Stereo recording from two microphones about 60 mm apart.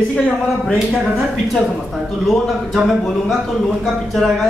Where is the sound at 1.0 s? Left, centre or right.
Centre.